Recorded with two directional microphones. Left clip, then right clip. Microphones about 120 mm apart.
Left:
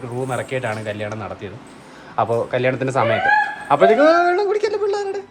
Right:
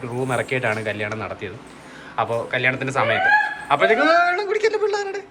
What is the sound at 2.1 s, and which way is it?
A woman's voice, 40° left (ahead or behind).